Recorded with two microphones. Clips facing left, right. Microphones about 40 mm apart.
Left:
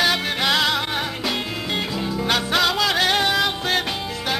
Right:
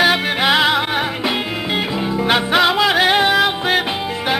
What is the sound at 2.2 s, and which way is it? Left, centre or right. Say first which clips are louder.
Music: right 6 dB; right.